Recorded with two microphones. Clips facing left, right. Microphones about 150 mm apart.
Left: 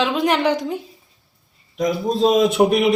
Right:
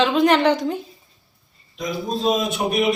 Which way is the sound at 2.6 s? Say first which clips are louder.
Left 8 dB; 70° left (ahead or behind).